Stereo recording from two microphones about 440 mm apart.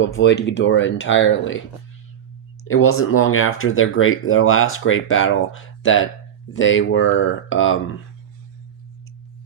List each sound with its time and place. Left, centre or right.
0.0 s speech: left
2.6 s speech: left